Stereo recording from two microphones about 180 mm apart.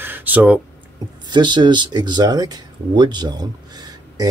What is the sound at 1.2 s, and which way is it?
Speech, 25° right (ahead or behind).